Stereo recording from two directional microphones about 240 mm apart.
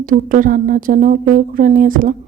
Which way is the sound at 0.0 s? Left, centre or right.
Right.